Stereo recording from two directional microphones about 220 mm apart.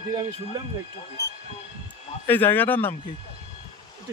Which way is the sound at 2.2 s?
10° left (ahead or behind).